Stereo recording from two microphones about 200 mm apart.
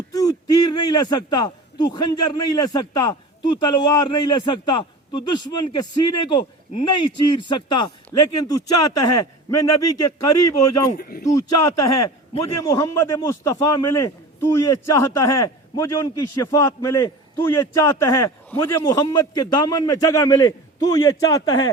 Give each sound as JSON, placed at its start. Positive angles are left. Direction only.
{"t": 0.1, "sound": "a man's voice", "side_deg": 20}
{"t": 10.9, "sound": "speech", "side_deg": 45}
{"t": 11.6, "sound": "a man's voice", "side_deg": 15}